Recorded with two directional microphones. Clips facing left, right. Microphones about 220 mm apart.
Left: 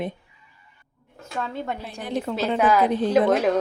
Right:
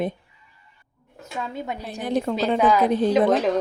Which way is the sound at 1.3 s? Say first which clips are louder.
Left 1 dB; 5° right (ahead or behind).